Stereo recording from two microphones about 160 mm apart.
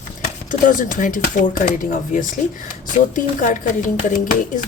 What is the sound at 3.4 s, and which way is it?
Speech, 55° left (ahead or behind).